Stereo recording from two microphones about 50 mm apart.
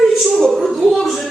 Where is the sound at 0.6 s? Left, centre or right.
Centre.